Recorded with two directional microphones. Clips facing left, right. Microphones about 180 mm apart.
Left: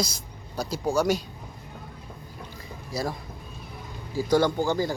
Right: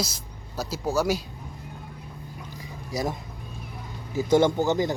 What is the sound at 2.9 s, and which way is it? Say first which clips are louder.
Speech: right 2 dB; 15° right (ahead or behind).